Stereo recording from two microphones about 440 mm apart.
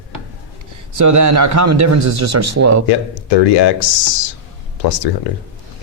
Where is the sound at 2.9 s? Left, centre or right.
Left.